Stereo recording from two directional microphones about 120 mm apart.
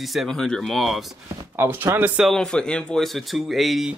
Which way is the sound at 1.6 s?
20° right (ahead or behind).